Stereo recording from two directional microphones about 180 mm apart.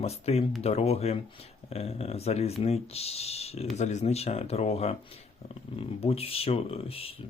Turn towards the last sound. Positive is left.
turn(degrees=30)  # may be behind; listen again after turning